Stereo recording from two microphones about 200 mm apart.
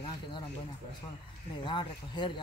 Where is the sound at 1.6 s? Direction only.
25° left (ahead or behind).